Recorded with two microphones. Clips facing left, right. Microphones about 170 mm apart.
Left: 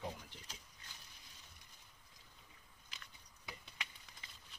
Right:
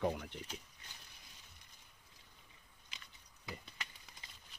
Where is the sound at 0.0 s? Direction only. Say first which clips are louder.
Right 10 dB; 65° right (ahead or behind).